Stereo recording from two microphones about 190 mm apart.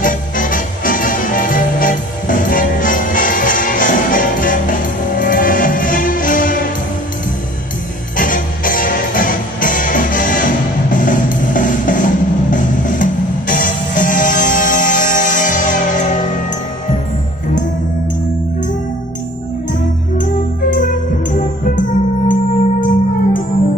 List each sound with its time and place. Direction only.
0.0 s music: 45° left (ahead or behind)
8.2 s music: 45° left (ahead or behind)
21.7 s music: 45° left (ahead or behind)